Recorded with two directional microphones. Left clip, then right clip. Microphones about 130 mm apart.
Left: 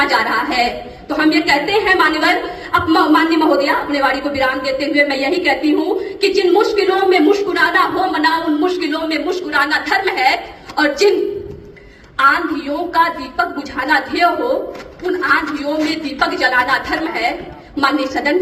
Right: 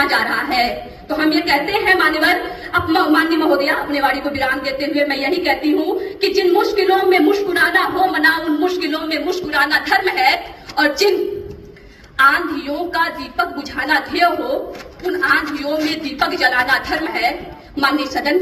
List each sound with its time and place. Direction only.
0.0 s a sound: 45° left (ahead or behind)
1.1 s a woman's voice: 50° left (ahead or behind)
12.1 s a woman's voice: 40° left (ahead or behind)